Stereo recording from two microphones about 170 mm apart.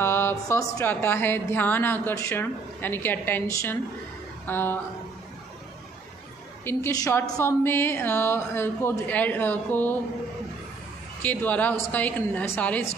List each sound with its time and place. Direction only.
0.0 s speech: 15° left (ahead or behind)
6.6 s speech: 15° left (ahead or behind)
11.2 s speech: 10° left (ahead or behind)